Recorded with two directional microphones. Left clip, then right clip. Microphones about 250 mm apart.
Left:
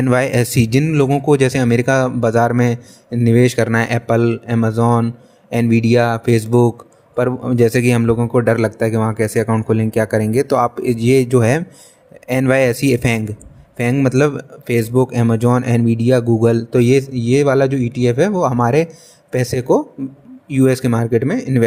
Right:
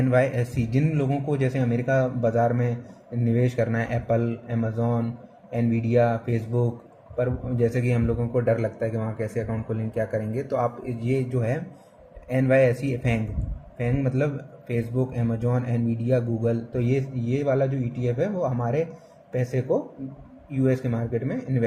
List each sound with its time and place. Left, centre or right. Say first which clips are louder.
0.0 s speech: left 7 dB; left